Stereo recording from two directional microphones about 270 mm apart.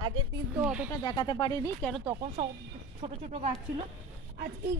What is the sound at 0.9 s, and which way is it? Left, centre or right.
Speech, centre.